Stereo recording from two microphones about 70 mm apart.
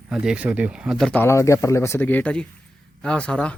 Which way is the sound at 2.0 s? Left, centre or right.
Left.